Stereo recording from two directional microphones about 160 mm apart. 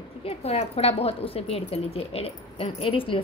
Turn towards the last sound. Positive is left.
turn(degrees=35)  # may be behind; listen again after turning